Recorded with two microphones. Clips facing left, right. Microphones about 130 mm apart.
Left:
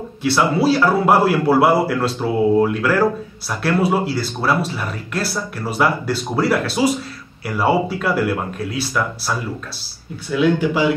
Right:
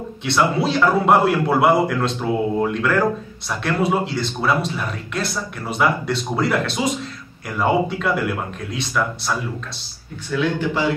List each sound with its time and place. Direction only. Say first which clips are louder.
0.2 s a man's voice: left 3 dB; 5° left (ahead or behind)